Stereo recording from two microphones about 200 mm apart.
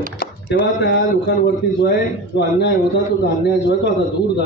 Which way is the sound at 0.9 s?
55° left (ahead or behind).